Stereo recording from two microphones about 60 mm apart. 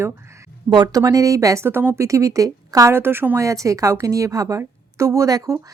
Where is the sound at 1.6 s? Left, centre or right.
Right.